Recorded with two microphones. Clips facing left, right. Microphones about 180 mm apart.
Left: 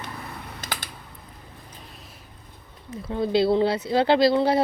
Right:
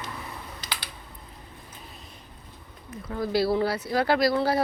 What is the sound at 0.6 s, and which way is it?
Typing, 50° left (ahead or behind).